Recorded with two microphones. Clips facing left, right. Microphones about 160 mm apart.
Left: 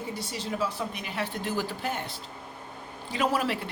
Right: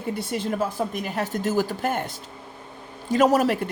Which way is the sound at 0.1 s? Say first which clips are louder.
Right 11 dB; 55° right (ahead or behind).